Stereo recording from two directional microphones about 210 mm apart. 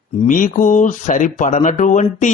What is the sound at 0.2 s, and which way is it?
Speech, 40° left (ahead or behind).